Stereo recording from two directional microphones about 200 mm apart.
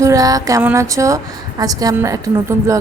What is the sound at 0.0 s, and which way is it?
A woman's voice, 15° right (ahead or behind).